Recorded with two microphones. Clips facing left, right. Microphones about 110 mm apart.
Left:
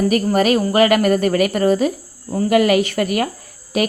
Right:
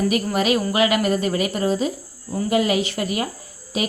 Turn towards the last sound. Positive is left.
turn(degrees=60)  # may be behind; listen again after turning